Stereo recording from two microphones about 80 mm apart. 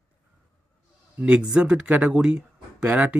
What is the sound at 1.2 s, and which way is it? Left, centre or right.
Speech, centre.